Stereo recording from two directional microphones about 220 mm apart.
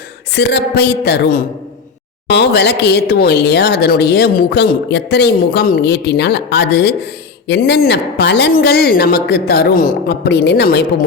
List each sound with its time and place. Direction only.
0.3 s speech: 50° left (ahead or behind)